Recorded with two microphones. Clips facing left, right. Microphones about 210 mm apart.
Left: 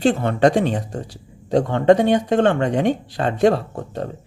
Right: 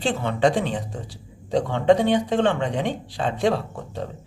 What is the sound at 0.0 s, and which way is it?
Speech, 45° left (ahead or behind).